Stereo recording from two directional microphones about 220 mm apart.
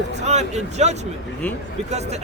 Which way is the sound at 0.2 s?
30° right (ahead or behind).